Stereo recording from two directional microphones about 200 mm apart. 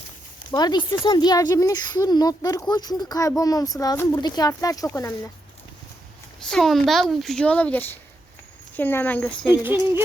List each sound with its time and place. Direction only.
0.5 s speech: 20° left (ahead or behind)
6.5 s a child's voice: centre (ahead or behind)
9.5 s a sound: 10° right (ahead or behind)